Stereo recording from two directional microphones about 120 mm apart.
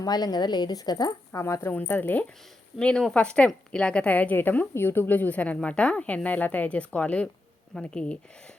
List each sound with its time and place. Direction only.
0.0 s a woman's voice: 35° left (ahead or behind); by 8.2 s 10° left (ahead or behind)